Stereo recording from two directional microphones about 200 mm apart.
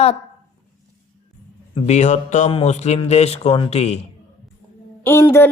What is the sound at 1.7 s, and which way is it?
Speech, 35° left (ahead or behind).